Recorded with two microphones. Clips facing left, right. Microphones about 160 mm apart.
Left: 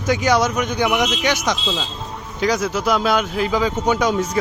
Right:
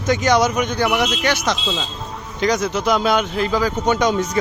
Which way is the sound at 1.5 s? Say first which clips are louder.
Even; centre (ahead or behind).